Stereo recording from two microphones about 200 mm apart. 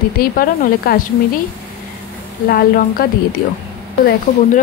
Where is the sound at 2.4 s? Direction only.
50° left (ahead or behind).